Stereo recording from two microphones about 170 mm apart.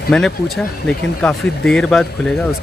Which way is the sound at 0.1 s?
5° left (ahead or behind).